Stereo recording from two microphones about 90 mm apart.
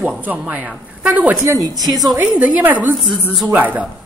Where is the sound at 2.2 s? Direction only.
15° right (ahead or behind).